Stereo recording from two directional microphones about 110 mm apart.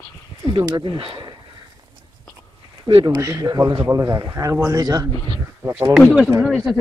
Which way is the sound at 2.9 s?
55° right (ahead or behind).